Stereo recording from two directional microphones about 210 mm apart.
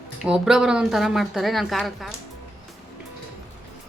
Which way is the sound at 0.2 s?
5° right (ahead or behind).